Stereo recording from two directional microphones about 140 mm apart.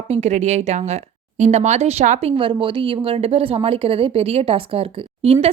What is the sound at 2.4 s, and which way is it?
Speech, 35° right (ahead or behind).